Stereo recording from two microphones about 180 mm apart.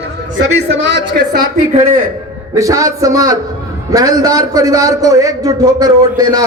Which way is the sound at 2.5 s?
20° right (ahead or behind).